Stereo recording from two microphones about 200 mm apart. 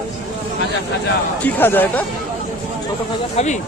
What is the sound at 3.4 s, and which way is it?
Speech, 35° left (ahead or behind).